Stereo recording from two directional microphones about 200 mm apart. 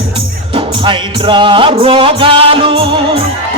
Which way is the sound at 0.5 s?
25° right (ahead or behind).